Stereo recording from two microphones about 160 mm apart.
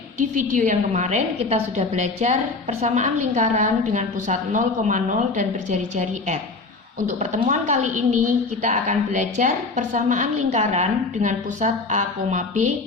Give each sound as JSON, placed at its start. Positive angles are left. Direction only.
{"t": 0.5, "sound": "a woman's voice", "side_deg": -50}